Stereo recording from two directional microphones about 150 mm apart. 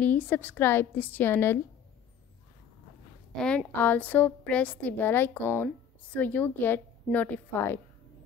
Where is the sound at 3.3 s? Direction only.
5° left (ahead or behind).